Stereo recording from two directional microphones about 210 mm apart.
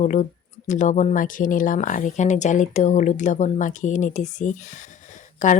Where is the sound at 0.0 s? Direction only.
35° left (ahead or behind).